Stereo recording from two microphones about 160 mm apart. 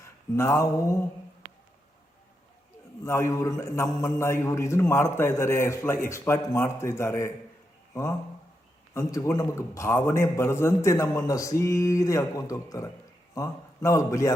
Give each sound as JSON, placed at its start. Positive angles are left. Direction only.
{"t": 0.0, "sound": "a sound", "side_deg": 20}
{"t": 3.0, "sound": "a man's voice", "side_deg": 15}
{"t": 8.9, "sound": "a man's voice", "side_deg": 20}